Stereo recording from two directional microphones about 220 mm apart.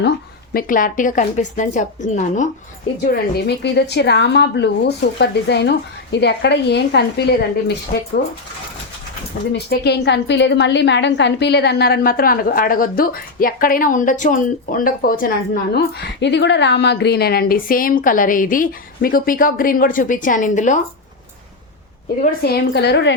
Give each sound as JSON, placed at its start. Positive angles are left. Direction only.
{"t": 0.5, "sound": "a woman's voice", "side_deg": 40}
{"t": 3.1, "sound": "speech", "side_deg": 50}
{"t": 9.5, "sound": "a woman's voice", "side_deg": 50}
{"t": 22.2, "sound": "speech", "side_deg": 45}